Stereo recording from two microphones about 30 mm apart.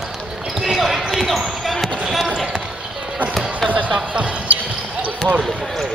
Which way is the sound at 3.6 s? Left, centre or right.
Centre.